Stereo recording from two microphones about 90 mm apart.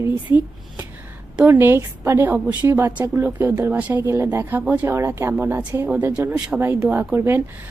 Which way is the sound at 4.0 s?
30° right (ahead or behind).